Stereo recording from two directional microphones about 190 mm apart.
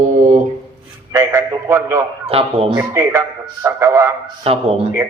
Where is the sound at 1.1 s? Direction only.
15° right (ahead or behind).